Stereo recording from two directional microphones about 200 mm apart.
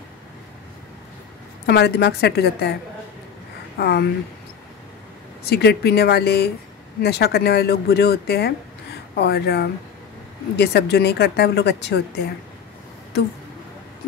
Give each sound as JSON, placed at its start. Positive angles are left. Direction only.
{"t": 1.7, "sound": "a woman's voice", "side_deg": 55}
{"t": 3.7, "sound": "a woman's voice", "side_deg": 55}
{"t": 5.5, "sound": "a woman's voice", "side_deg": 55}